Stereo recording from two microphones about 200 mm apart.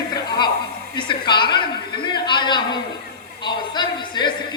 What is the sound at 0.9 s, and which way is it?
Speech, 25° left (ahead or behind).